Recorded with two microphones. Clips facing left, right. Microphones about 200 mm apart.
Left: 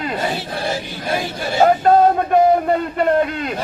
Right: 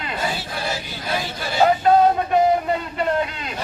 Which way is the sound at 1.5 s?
45° left (ahead or behind).